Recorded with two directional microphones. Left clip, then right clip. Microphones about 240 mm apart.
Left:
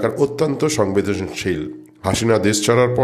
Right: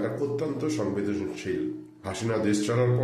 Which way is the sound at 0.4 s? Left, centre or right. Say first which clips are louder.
Left 11 dB; left.